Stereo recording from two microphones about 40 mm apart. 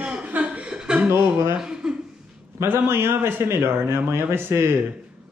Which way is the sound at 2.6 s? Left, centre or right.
Right.